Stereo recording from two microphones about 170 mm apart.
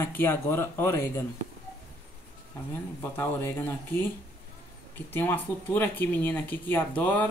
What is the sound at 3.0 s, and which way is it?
Speech, 15° left (ahead or behind).